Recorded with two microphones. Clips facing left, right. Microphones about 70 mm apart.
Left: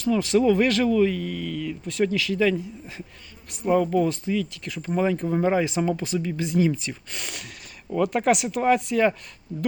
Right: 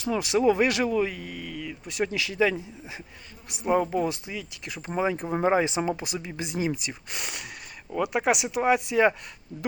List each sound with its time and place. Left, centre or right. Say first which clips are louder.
0.0 s speech: left 3 dB; centre
4.3 s speech: left 10 dB; centre
4.7 s speech: left 3 dB; right